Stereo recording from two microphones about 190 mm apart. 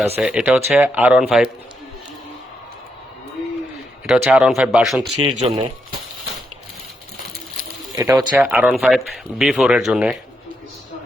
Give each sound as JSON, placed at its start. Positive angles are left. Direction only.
{"t": 0.2, "sound": "speech", "side_deg": -5}
{"t": 4.1, "sound": "speech", "side_deg": -5}
{"t": 5.2, "sound": "speech", "side_deg": -30}
{"t": 8.1, "sound": "speech", "side_deg": -5}